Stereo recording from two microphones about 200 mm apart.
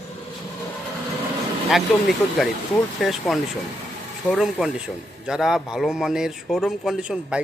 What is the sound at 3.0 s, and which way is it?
A man's voice, centre (ahead or behind).